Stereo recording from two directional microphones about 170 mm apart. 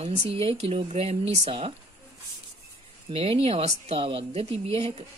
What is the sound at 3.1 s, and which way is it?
Speech, 35° right (ahead or behind).